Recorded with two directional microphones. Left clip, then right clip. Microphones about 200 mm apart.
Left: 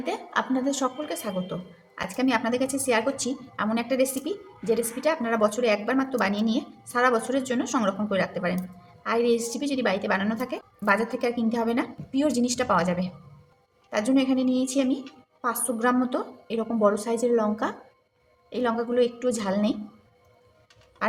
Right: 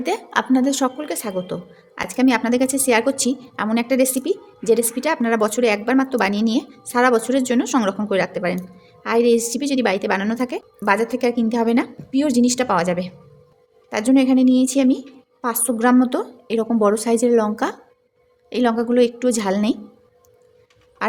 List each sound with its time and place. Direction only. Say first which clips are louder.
0.0 s a woman's voice: right 6 dB; 45° right (ahead or behind)
21.0 s quack: right 4 dB; 45° right (ahead or behind)